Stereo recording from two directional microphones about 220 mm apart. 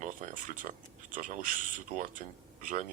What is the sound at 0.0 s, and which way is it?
A man's voice, 35° right (ahead or behind).